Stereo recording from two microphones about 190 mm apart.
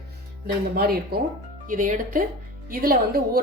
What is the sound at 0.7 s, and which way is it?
Speech, 55° right (ahead or behind).